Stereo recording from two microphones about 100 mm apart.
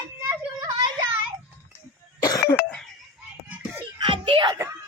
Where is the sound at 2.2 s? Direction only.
35° left (ahead or behind).